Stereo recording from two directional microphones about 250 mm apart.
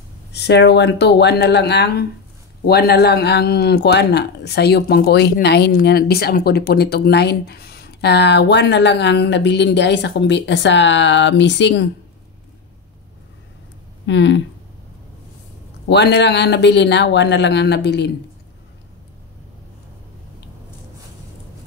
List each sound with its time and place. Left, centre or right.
0.3 s speech: left
14.0 s speech: left
15.9 s speech: left